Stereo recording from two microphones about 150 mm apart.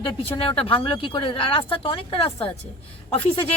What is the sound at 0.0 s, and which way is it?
Speech, 35° left (ahead or behind).